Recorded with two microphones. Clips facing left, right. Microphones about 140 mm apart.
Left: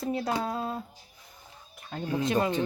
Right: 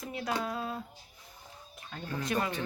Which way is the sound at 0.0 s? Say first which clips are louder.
Left 5 dB; 35° left (ahead or behind).